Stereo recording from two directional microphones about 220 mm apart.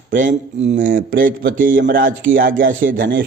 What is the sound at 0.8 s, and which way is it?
Speech, 60° right (ahead or behind).